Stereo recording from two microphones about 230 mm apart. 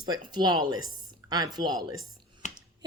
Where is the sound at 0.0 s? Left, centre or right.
Centre.